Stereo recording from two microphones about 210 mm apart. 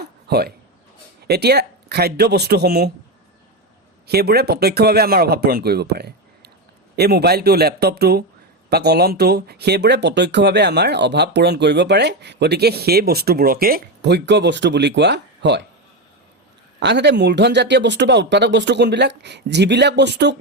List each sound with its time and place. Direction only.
0.0 s a sound: 50° right (ahead or behind)
1.3 s speech: 50° right (ahead or behind)
4.0 s speech: 50° right (ahead or behind)
16.8 s speech: 55° right (ahead or behind)